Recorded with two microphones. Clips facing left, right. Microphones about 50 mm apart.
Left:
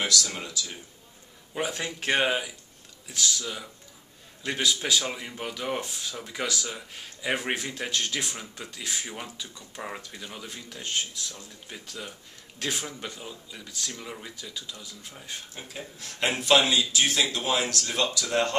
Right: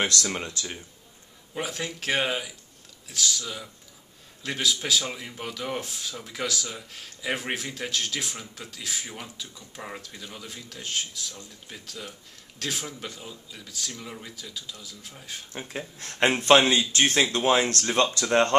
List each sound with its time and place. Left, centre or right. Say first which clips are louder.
0.0 s speech: right 2 dB; right
1.5 s speech: left 1 dB; centre
16.0 s speech: right 5 dB; right